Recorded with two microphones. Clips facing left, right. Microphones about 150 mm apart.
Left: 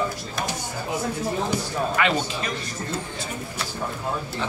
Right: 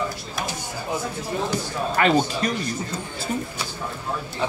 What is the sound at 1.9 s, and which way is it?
Speech, 40° right (ahead or behind).